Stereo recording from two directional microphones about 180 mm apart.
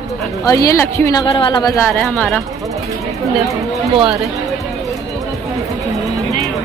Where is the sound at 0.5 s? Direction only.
20° left (ahead or behind).